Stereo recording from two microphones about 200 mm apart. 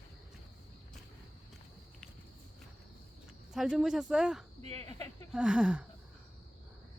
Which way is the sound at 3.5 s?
Centre (ahead or behind).